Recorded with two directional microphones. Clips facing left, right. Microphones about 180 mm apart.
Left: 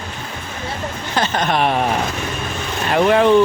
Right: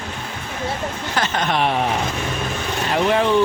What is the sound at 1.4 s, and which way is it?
Speech, 50° left (ahead or behind).